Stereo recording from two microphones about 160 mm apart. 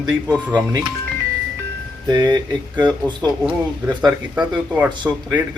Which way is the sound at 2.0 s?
25° right (ahead or behind).